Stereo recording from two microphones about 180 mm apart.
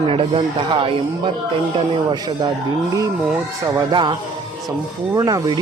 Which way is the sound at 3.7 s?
20° right (ahead or behind).